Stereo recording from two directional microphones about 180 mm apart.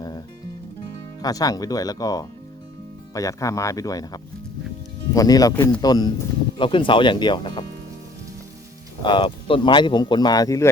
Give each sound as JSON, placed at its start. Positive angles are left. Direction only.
{"t": 1.2, "sound": "speech", "side_deg": 20}
{"t": 9.0, "sound": "speech", "side_deg": 25}